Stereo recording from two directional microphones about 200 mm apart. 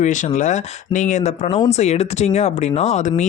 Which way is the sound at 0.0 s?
35° left (ahead or behind).